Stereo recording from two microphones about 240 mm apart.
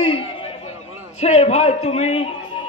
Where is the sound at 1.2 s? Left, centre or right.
Left.